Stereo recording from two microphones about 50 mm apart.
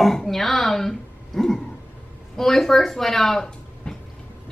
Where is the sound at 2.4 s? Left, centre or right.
Centre.